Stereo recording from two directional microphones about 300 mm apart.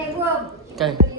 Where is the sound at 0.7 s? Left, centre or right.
Centre.